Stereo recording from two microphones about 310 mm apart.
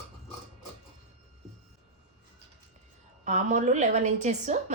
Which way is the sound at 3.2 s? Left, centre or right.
Right.